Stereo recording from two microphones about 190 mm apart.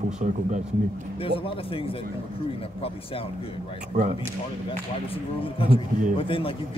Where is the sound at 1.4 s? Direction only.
30° left (ahead or behind).